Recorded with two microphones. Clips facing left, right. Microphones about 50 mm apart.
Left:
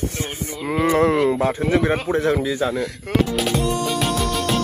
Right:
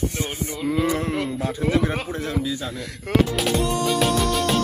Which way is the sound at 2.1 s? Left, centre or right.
Left.